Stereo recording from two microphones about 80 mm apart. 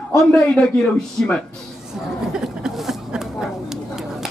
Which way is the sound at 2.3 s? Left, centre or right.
Centre.